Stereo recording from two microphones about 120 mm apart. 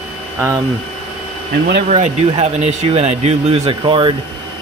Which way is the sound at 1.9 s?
65° right (ahead or behind).